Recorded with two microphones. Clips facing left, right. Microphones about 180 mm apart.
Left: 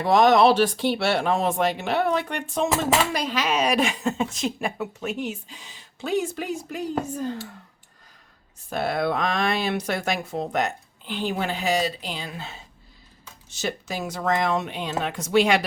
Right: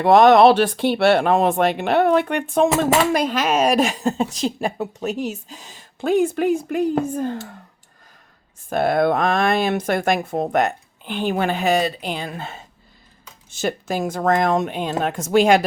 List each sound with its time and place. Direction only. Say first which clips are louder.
0.0 s speech: right 5 dB; 60° right (ahead or behind)
8.7 s speech: right 7 dB; 50° right (ahead or behind)